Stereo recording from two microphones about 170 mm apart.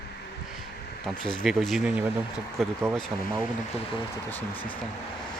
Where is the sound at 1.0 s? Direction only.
5° left (ahead or behind).